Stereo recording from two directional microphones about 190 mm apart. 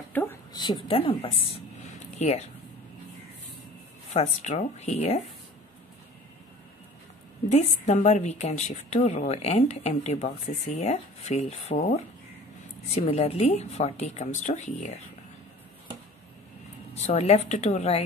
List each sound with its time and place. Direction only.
0.1 s a sound: 10° left (ahead or behind)
0.5 s a woman's voice: 25° left (ahead or behind)
4.1 s a woman's voice: 40° left (ahead or behind)
7.5 s a woman's voice: 35° left (ahead or behind)
16.9 s a woman's voice: 35° left (ahead or behind)